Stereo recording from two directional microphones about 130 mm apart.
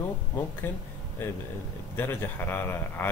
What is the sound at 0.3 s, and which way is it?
Speech, 15° left (ahead or behind).